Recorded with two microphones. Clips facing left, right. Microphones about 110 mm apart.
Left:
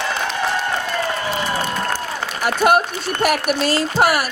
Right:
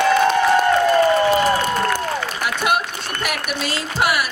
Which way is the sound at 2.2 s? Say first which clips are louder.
Left 4 dB; 45° left (ahead or behind).